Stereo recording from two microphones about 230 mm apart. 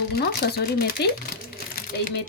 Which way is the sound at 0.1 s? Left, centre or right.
Left.